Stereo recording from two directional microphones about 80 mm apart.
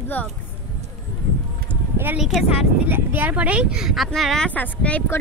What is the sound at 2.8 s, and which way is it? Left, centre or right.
Speech, right.